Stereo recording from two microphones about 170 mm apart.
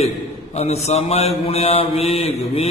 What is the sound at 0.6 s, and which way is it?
Mantra, 40° left (ahead or behind).